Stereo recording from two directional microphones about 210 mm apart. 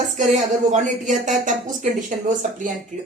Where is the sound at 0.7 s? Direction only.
35° right (ahead or behind).